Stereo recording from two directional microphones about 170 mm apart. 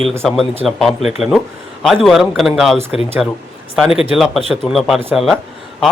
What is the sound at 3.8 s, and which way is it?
Speech, 5° right (ahead or behind).